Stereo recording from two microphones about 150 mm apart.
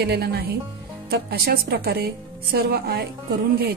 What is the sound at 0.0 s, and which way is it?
A woman's voice, 90° right.